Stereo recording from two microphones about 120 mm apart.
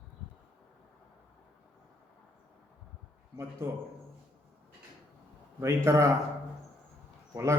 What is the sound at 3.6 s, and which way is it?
Speech, 20° right (ahead or behind).